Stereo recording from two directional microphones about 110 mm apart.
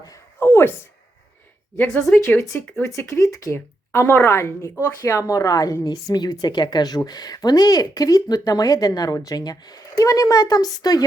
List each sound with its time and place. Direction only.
0.3 s a sound: 20° left (ahead or behind)
1.8 s speech: 10° left (ahead or behind)
2.2 s a woman's voice: 20° left (ahead or behind)